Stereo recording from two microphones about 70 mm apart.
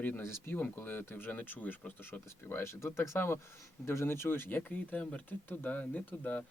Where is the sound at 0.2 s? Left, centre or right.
Left.